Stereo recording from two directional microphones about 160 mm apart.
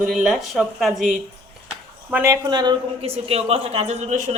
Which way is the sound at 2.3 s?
25° right (ahead or behind).